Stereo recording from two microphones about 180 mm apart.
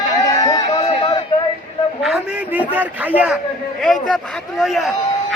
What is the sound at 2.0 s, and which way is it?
A man's voice, 5° right (ahead or behind).